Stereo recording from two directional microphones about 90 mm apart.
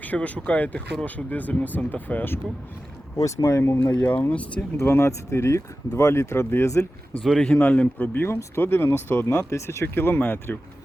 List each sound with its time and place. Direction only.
0.0 s speech: 15° left (ahead or behind)
3.2 s speech: 35° left (ahead or behind)
3.9 s speech: 20° left (ahead or behind)
4.8 s speech: 30° left (ahead or behind)
7.2 s speech: 5° left (ahead or behind)
7.6 s speech: 20° left (ahead or behind)